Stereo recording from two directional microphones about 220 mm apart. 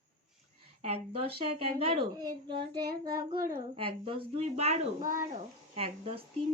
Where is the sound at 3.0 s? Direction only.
15° right (ahead or behind).